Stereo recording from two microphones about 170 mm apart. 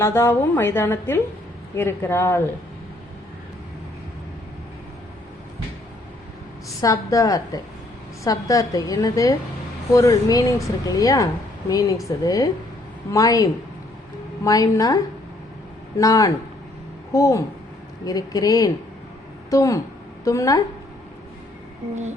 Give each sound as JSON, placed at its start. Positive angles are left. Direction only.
{"t": 0.0, "sound": "a woman's voice", "side_deg": 15}
{"t": 6.8, "sound": "a woman's voice", "side_deg": 20}